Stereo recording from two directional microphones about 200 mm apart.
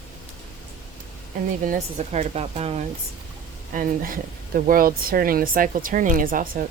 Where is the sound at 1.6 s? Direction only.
35° right (ahead or behind).